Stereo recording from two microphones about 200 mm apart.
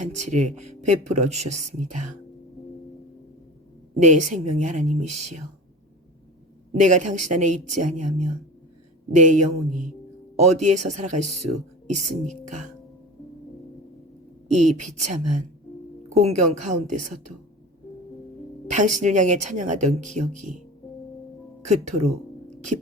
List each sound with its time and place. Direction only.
0.0 s speech: 35° right (ahead or behind)
4.0 s speech: 40° right (ahead or behind)
6.7 s speech: 35° right (ahead or behind)
14.5 s speech: 35° right (ahead or behind)
18.7 s speech: 40° right (ahead or behind)
21.7 s speech: 35° right (ahead or behind)